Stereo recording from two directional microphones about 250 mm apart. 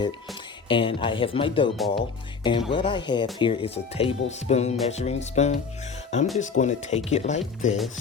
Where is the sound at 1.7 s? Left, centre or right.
Centre.